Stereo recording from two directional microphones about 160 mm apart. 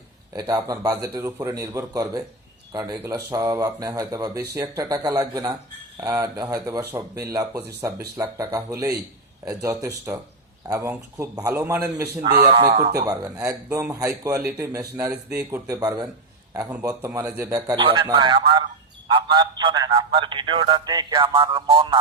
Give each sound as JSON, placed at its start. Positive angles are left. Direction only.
{"t": 0.3, "sound": "a man's voice", "side_deg": -20}
{"t": 16.9, "sound": "a man's voice", "side_deg": -15}